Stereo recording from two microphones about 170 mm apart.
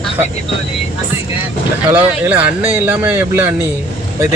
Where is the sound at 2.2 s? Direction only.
10° right (ahead or behind).